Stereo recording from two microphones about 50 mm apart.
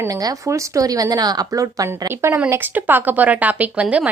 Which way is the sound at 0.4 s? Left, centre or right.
Right.